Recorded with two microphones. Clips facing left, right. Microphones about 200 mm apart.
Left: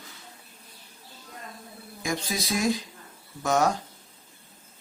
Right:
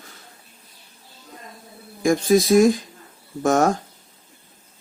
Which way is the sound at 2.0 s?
50° right (ahead or behind).